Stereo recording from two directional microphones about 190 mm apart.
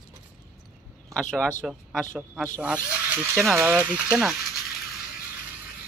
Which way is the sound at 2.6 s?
10° right (ahead or behind).